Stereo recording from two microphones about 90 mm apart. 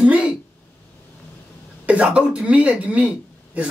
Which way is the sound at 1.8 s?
15° right (ahead or behind).